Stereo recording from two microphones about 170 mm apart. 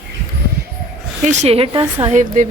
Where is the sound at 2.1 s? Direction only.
45° right (ahead or behind).